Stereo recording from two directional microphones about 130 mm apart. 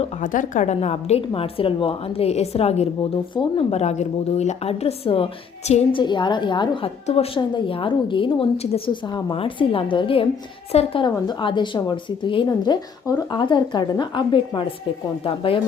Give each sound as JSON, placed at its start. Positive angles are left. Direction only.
{"t": 0.2, "sound": "a woman's voice", "side_deg": 85}
{"t": 3.3, "sound": "a woman's voice", "side_deg": 40}
{"t": 5.9, "sound": "speech", "side_deg": 40}
{"t": 7.1, "sound": "a woman's voice", "side_deg": 50}
{"t": 11.3, "sound": "a woman's voice", "side_deg": 35}